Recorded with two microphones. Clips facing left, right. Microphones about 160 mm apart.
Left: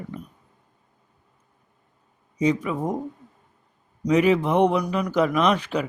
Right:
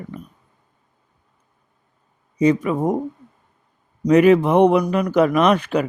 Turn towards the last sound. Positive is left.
turn(degrees=-55)  # may be behind; listen again after turning